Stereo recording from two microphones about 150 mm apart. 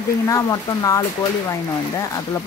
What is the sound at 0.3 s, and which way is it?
Speech, 25° left (ahead or behind).